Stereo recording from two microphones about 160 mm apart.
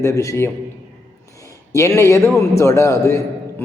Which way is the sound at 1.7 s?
20° left (ahead or behind).